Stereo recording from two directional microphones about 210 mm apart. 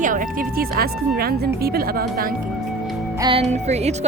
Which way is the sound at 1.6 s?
45° right (ahead or behind).